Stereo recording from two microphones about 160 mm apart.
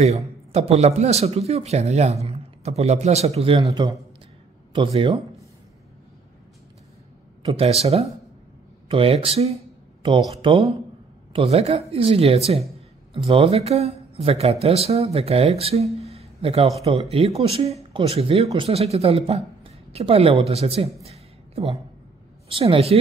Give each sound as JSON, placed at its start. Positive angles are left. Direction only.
{"t": 0.0, "sound": "speech", "side_deg": -40}
{"t": 4.7, "sound": "speech", "side_deg": -35}
{"t": 7.4, "sound": "speech", "side_deg": -35}